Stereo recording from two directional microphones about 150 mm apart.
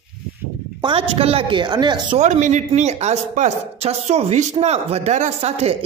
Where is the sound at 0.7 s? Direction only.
35° right (ahead or behind).